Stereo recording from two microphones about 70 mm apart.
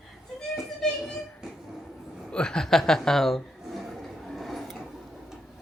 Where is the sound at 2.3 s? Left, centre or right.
Centre.